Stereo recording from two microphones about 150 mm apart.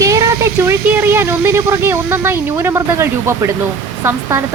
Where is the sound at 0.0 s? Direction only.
20° right (ahead or behind).